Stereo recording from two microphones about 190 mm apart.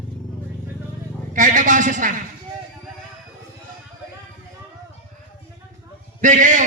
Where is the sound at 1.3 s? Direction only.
40° right (ahead or behind).